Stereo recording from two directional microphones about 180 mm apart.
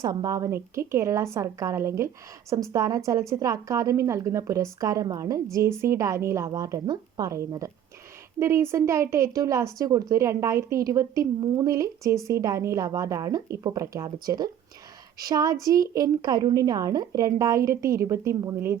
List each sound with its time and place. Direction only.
0.0 s a woman's voice: 20° right (ahead or behind)